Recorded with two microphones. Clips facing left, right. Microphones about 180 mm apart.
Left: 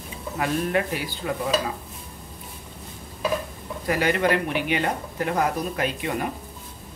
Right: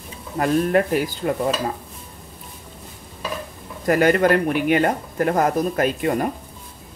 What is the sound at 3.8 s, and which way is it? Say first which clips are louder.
Speech: right 6 dB; 50° right (ahead or behind).